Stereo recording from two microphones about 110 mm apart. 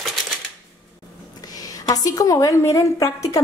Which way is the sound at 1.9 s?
35° left (ahead or behind).